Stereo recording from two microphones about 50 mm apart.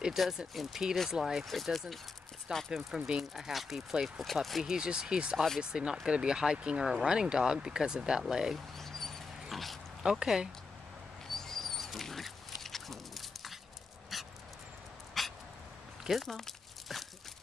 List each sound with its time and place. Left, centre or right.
0.2 s speech: centre
1.4 s speech: centre
2.5 s speech: centre
4.6 s speech: centre
8.7 s a sound: centre
9.5 s dog: centre
10.0 s speech: centre
11.3 s pig: centre
14.1 s dog: centre
16.0 s biting: centre
16.3 s crumpling: centre